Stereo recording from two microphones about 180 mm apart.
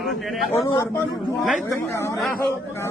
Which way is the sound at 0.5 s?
15° left (ahead or behind).